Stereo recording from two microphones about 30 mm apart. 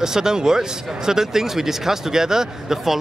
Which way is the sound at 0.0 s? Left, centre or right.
Centre.